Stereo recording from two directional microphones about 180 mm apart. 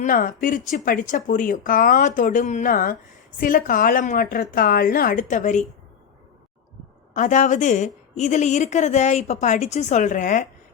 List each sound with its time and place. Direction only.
0.0 s a woman's voice: 50° left (ahead or behind)
7.1 s a woman's voice: 45° left (ahead or behind)